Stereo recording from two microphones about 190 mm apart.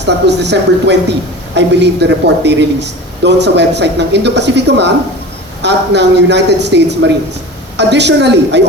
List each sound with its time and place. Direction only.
0.0 s speech: 65° right (ahead or behind)